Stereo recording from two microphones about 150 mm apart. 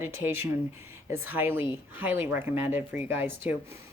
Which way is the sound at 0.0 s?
15° right (ahead or behind).